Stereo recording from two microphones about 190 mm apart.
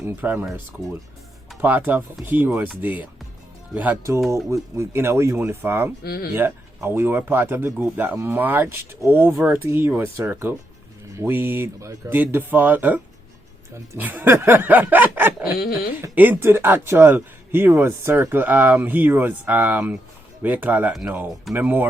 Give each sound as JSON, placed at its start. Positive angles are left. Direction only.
{"t": 0.0, "sound": "speech", "side_deg": -10}
{"t": 6.0, "sound": "speech", "side_deg": 55}
{"t": 6.3, "sound": "speech", "side_deg": -10}
{"t": 15.5, "sound": "speech", "side_deg": 50}
{"t": 16.0, "sound": "speech", "side_deg": -10}